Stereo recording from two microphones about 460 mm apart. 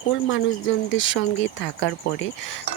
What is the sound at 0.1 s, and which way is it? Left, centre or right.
Speech, left.